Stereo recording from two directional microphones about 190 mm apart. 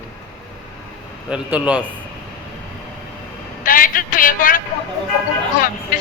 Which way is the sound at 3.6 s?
45° left (ahead or behind).